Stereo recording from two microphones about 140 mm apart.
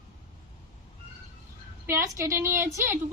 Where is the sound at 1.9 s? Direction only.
20° right (ahead or behind).